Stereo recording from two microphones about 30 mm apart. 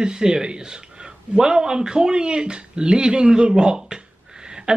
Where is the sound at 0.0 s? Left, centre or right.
Right.